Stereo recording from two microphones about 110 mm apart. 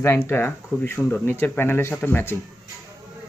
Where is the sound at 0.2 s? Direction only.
20° left (ahead or behind).